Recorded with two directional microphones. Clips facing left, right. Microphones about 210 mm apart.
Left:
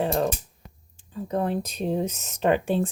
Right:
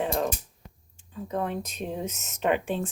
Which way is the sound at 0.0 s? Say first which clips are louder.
Left 3 dB; 35° left (ahead or behind).